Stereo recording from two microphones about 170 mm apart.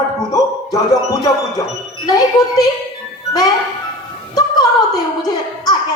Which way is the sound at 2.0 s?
20° left (ahead or behind).